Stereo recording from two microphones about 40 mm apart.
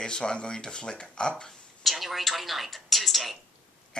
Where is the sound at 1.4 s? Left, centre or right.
Centre.